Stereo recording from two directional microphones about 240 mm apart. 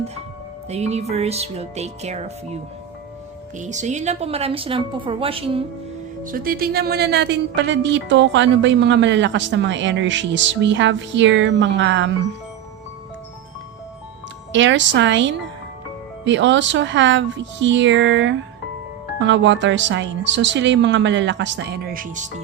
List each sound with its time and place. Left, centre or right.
0.7 s a woman's voice: right
3.6 s a woman's voice: right
6.2 s speech: right
14.5 s speech: right